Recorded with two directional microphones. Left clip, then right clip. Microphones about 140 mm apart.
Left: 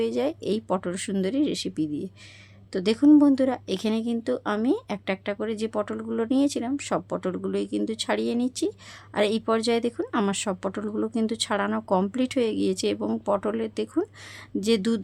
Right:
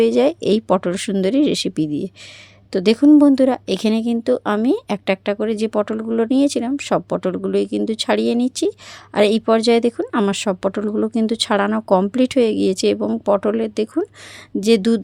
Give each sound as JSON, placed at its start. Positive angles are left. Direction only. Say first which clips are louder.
{"t": 0.0, "sound": "speech", "louder": "right 11 dB", "side_deg": -55}